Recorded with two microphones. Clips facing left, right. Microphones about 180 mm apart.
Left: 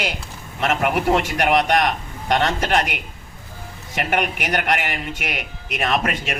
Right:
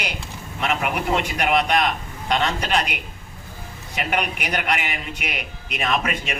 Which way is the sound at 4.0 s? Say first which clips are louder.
Left 3 dB; 50° left (ahead or behind).